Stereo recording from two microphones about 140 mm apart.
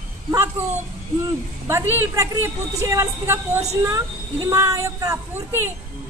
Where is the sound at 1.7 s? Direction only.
20° right (ahead or behind).